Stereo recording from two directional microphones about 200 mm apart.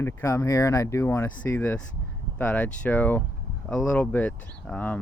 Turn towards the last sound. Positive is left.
turn(degrees=5)  # may be behind; listen again after turning